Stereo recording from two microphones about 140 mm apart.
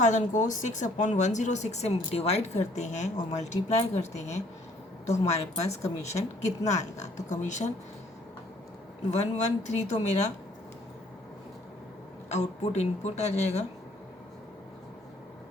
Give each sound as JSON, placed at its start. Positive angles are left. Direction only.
{"t": 0.0, "sound": "speech", "side_deg": 60}
{"t": 9.0, "sound": "speech", "side_deg": 55}
{"t": 12.3, "sound": "speech", "side_deg": 55}